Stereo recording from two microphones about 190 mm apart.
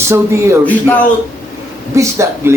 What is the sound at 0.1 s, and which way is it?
Speech, 15° right (ahead or behind).